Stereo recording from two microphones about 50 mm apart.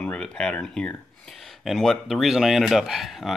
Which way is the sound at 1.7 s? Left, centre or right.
Centre.